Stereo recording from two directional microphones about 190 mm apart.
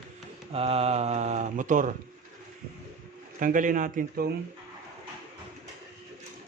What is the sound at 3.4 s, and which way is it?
Speech, 45° right (ahead or behind).